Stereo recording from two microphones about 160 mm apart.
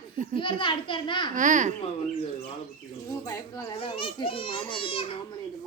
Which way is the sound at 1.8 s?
40° left (ahead or behind).